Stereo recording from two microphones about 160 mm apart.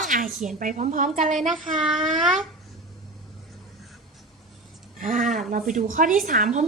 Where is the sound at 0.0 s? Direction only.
55° right (ahead or behind).